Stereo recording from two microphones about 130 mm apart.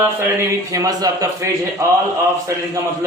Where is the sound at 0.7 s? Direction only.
30° right (ahead or behind).